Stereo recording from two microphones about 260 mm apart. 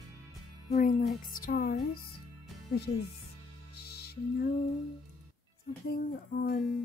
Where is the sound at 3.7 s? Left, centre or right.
Left.